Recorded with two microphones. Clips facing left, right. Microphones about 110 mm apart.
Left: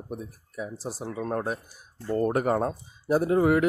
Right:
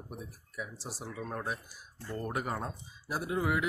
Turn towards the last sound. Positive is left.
turn(degrees=50)  # may be behind; listen again after turning